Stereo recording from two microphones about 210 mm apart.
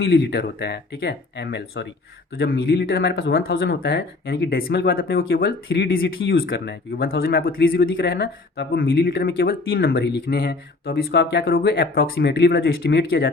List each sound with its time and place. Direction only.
0.0 s speech: 55° left (ahead or behind)